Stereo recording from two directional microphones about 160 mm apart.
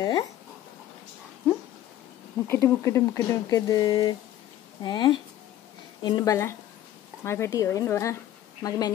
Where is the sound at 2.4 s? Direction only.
15° left (ahead or behind).